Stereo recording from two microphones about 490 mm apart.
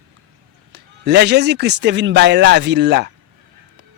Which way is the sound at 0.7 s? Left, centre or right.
Centre.